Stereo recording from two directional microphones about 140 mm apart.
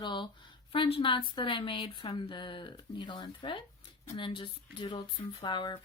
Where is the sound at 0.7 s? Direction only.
40° left (ahead or behind).